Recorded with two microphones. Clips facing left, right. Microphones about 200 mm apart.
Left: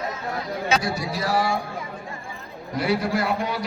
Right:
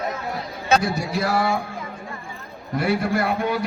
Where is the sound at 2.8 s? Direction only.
55° right (ahead or behind).